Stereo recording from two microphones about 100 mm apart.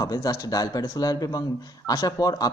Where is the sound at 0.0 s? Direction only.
40° left (ahead or behind).